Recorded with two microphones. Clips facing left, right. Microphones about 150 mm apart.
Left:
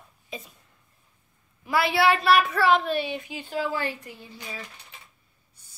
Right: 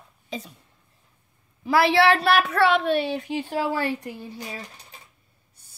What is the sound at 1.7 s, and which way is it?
A woman's voice, 80° right.